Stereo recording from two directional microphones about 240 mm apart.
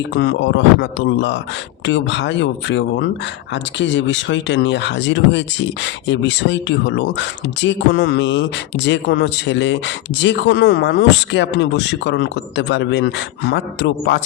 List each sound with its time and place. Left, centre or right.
0.1 s speech: left